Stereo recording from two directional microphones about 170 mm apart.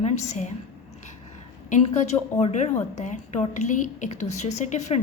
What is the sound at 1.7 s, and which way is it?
A woman's voice, 40° left (ahead or behind).